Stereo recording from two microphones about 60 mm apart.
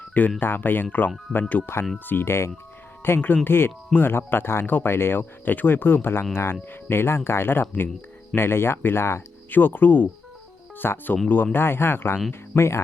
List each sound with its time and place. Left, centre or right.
0.1 s speech: left
9.5 s speech: left
12.3 s speech: left